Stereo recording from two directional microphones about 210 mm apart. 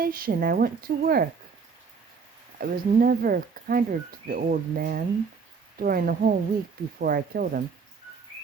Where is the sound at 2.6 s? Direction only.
45° right (ahead or behind).